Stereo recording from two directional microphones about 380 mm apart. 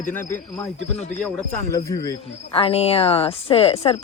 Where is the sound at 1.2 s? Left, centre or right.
Centre.